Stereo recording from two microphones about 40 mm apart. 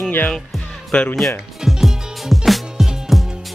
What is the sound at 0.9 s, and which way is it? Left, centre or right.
Speech, left.